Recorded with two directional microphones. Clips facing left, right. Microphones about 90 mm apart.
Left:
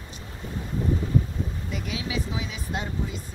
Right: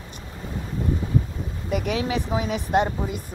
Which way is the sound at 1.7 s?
50° right (ahead or behind).